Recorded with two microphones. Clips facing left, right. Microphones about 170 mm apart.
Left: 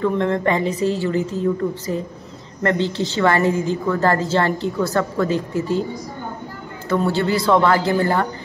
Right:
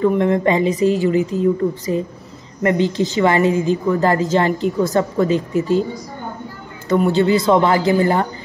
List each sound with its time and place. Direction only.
0.0 s a woman's voice: 15° right (ahead or behind)
6.9 s a woman's voice: 20° right (ahead or behind)